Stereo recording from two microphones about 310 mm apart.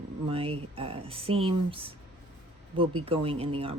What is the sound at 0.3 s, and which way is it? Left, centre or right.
Speech, centre.